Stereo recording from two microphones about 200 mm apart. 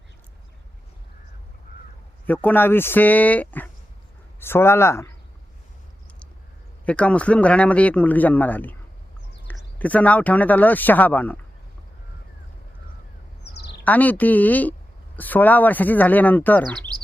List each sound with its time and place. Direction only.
2.2 s a woman's voice: 10° left (ahead or behind)
6.8 s a woman's voice: 5° left (ahead or behind)
13.4 s bird: 55° left (ahead or behind)
13.8 s a woman's voice: 10° left (ahead or behind)